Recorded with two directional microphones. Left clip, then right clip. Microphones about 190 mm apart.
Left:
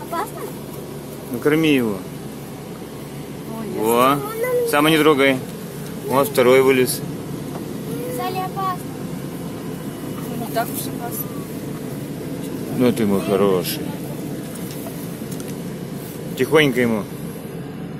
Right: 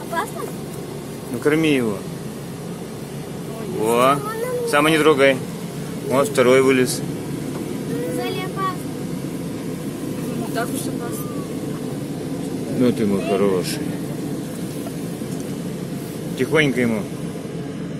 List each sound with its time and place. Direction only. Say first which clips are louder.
1.4 s speech: left 1 dB; centre (ahead or behind)
3.8 s speech: even; 5° left (ahead or behind)
12.8 s speech: left 1 dB; 25° left (ahead or behind)
16.3 s speech: left 3 dB; 20° left (ahead or behind)